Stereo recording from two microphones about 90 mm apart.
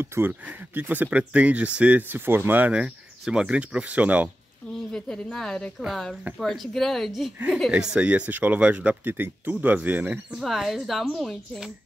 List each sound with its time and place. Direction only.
0.0 s speech: 25° right (ahead or behind)
2.8 s speech: 10° right (ahead or behind)
4.9 s speech: 10° left (ahead or behind)
7.7 s speech: 10° right (ahead or behind)
10.3 s speech: centre (ahead or behind)